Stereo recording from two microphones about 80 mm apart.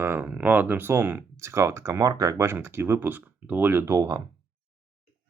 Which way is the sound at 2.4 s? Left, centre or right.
Right.